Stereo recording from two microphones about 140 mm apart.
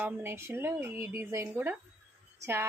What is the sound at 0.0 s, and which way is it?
A woman's voice, 15° right (ahead or behind).